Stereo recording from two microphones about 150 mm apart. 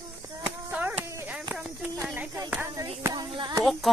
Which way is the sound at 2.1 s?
15° right (ahead or behind).